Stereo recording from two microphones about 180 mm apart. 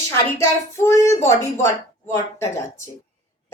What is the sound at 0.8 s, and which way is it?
A woman's voice, 15° left (ahead or behind).